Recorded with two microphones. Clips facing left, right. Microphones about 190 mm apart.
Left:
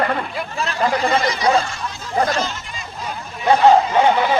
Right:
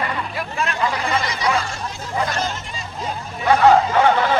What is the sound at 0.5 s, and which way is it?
Speech, 35° left (ahead or behind).